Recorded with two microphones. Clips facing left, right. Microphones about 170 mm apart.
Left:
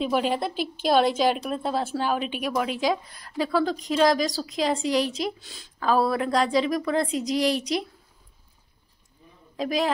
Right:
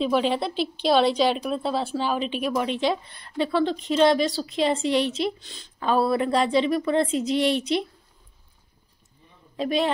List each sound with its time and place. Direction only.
0.0 s a woman's voice: 10° left (ahead or behind)
0.4 s a woman's voice: 50° left (ahead or behind)
1.1 s a woman's voice: 5° left (ahead or behind)
9.6 s a man's voice: centre (ahead or behind)